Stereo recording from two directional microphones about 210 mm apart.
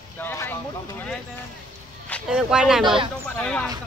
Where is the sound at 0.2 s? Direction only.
10° left (ahead or behind).